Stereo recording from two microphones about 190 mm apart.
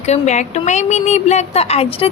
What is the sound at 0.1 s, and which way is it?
A woman's voice, 40° left (ahead or behind).